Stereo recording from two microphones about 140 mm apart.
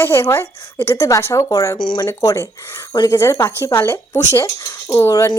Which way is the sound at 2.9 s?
30° left (ahead or behind).